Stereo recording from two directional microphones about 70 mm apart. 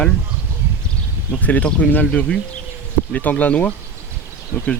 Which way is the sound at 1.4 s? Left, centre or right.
Left.